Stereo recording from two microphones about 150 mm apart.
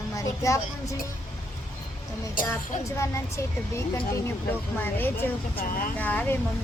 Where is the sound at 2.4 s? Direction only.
65° left (ahead or behind).